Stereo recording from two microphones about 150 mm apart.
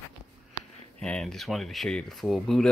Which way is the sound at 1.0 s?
5° left (ahead or behind).